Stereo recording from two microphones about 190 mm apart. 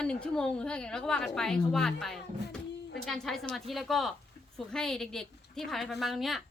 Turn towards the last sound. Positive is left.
turn(degrees=0)  # may be behind; listen again after turning